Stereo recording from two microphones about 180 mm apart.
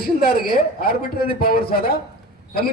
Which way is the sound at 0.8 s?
55° left (ahead or behind).